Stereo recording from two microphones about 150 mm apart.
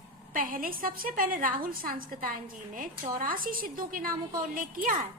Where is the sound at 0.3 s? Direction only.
65° right (ahead or behind).